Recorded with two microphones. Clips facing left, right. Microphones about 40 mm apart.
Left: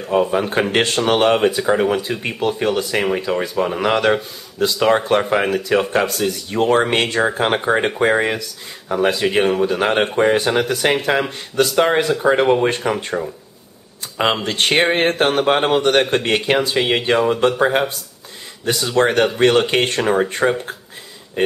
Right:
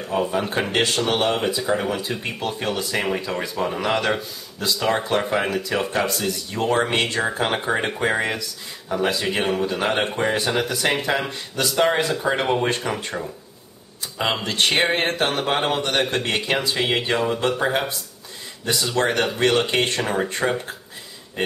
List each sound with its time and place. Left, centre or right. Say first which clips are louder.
0.2 s speech: left 5 dB; centre
0.6 s speech: left 3 dB; left
2.8 s speech: left 5 dB; centre
10.1 s speech: left 6 dB; left
14.4 s speech: left 4 dB; left
18.7 s speech: left 5 dB; centre